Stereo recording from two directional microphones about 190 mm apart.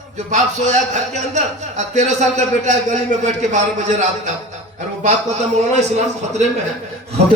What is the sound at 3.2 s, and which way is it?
Speech, 40° right (ahead or behind).